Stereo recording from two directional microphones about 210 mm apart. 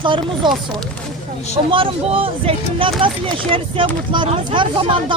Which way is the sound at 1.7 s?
25° right (ahead or behind).